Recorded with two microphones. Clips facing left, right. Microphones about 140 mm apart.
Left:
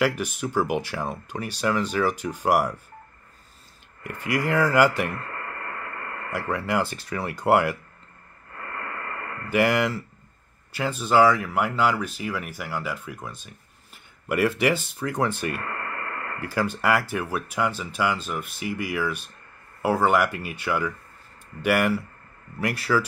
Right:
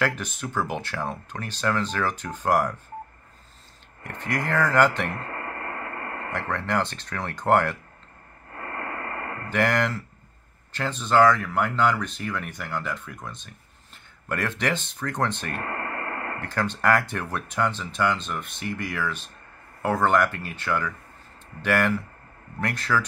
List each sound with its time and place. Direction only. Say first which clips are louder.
0.0 s speech: left 3 dB; 10° left (ahead or behind)
4.1 s speech: left 3 dB; 10° left (ahead or behind)
5.1 s radio: right 1 dB; 30° right (ahead or behind)
6.3 s speech: left 1 dB; 10° left (ahead or behind)
8.5 s radio: right 2 dB; 30° right (ahead or behind)
9.5 s speech: left 2 dB; 10° left (ahead or behind)
15.5 s radio: right 1 dB; 30° right (ahead or behind)
16.3 s speech: left 4 dB; 10° left (ahead or behind)